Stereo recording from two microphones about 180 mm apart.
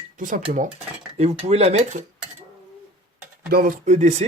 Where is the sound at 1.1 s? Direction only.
35° right (ahead or behind).